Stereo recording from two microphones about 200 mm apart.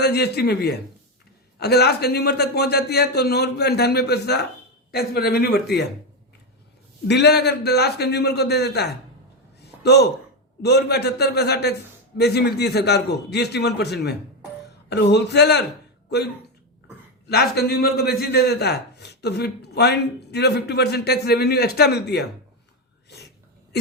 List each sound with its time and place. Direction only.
0.0 s a man's voice: 55° left (ahead or behind)
7.1 s a man's voice: 55° left (ahead or behind)
9.6 s a sound: 55° left (ahead or behind)
10.6 s a man's voice: 55° left (ahead or behind)
23.0 s sneeze: 55° left (ahead or behind)